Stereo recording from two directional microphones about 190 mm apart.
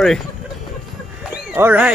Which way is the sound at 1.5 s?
10° right (ahead or behind).